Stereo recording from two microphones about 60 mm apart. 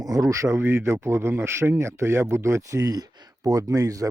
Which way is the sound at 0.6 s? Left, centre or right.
Right.